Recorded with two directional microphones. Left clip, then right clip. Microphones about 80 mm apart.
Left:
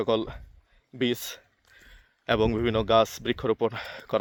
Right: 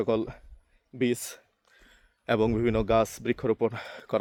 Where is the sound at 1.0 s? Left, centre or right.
Centre.